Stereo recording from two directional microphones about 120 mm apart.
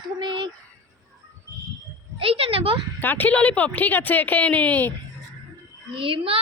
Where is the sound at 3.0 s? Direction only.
15° left (ahead or behind).